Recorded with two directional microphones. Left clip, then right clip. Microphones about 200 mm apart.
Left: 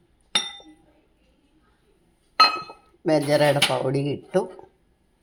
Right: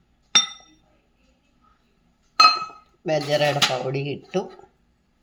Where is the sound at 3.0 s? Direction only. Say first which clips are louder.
Left 2 dB; 20° left (ahead or behind).